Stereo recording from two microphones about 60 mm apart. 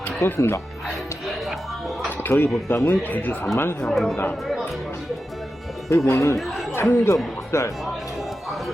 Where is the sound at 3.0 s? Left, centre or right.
Left.